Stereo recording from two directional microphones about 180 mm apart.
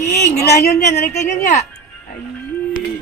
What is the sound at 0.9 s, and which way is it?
Speech, 60° left (ahead or behind).